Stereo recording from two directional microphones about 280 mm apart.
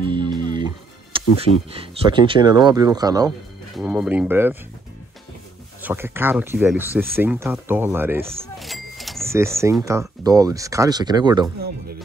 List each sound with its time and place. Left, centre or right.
0.0 s music: centre
1.1 s a sound: centre
1.7 s speech: centre
5.8 s speech: centre
8.5 s a sound: centre
9.3 s speech: centre